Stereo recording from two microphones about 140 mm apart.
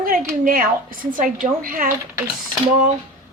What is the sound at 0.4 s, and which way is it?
Speech, 90° right.